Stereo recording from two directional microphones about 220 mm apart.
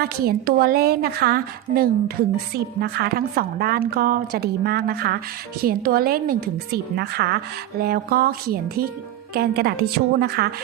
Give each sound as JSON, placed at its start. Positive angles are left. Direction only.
{"t": 0.0, "sound": "a woman's voice", "side_deg": -45}